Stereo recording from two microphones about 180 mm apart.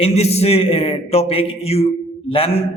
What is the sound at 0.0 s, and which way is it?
A man's voice, 35° left (ahead or behind).